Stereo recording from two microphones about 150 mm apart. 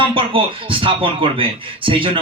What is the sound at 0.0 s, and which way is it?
Speech, 35° right (ahead or behind).